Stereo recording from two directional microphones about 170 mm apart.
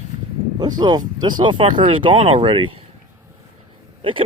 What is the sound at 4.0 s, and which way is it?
Speech, 30° right (ahead or behind).